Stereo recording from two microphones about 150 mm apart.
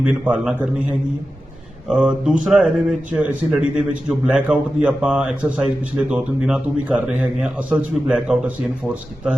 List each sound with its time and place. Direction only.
0.0 s a man's voice: 5° right (ahead or behind)